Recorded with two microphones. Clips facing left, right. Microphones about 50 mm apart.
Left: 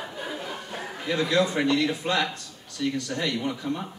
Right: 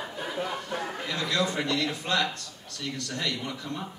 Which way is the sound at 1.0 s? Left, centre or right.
Left.